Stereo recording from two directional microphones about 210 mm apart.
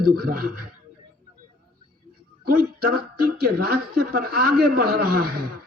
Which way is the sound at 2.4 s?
45° right (ahead or behind).